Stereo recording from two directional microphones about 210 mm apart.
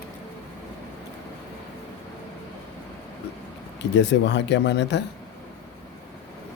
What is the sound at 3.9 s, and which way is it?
Speech, 55° left (ahead or behind).